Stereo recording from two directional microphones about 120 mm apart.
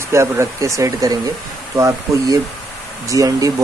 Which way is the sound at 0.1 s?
25° right (ahead or behind).